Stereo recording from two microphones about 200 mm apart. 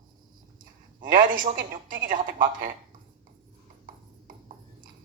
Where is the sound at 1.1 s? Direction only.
45° right (ahead or behind).